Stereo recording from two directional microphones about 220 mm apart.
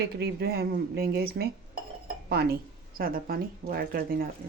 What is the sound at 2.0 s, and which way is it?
Dishes, 45° right (ahead or behind).